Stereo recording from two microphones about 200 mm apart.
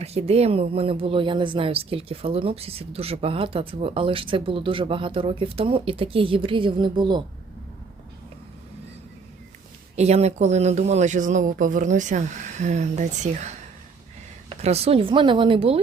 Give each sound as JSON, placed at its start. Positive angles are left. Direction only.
{"t": 0.0, "sound": "speech", "side_deg": -30}
{"t": 9.9, "sound": "speech", "side_deg": -35}
{"t": 14.5, "sound": "speech", "side_deg": -30}